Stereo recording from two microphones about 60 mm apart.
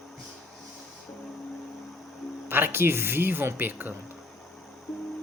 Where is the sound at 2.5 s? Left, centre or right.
Right.